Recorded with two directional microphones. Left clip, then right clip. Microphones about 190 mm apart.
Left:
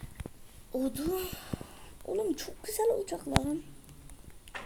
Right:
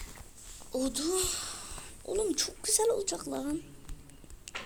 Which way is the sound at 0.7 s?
45° left (ahead or behind).